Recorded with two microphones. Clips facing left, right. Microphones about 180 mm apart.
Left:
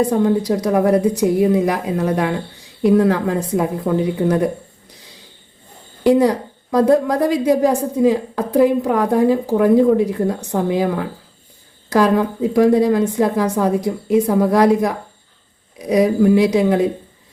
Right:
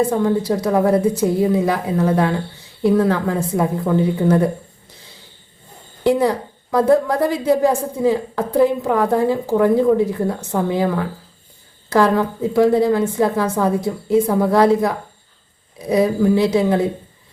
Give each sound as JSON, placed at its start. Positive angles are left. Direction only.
{"t": 0.2, "sound": "a woman's voice", "side_deg": 20}
{"t": 6.0, "sound": "a woman's voice", "side_deg": 20}